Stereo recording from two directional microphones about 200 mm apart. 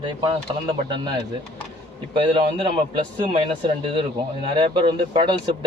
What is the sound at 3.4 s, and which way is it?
Speech, 25° right (ahead or behind).